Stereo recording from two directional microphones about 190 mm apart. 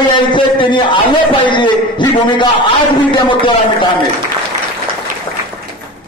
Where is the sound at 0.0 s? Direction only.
25° left (ahead or behind).